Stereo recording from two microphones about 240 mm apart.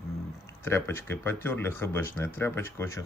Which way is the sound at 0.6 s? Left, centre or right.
Centre.